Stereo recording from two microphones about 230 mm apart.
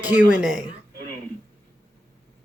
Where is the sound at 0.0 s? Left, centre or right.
Centre.